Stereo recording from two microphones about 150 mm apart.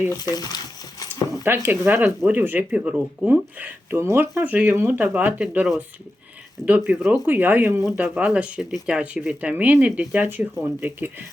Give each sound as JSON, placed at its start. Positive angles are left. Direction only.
{"t": 0.1, "sound": "speech", "side_deg": 25}
{"t": 1.5, "sound": "speech", "side_deg": -15}